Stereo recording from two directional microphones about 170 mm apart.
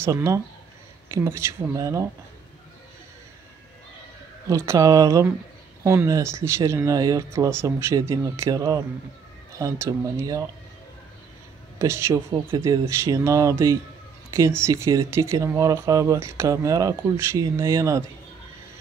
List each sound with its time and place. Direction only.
0.0 s speech: 15° right (ahead or behind)
4.5 s speech: 20° right (ahead or behind)
11.8 s speech: 15° right (ahead or behind)